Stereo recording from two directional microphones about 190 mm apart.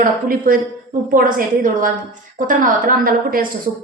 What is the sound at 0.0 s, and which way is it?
A woman's voice, 45° right (ahead or behind).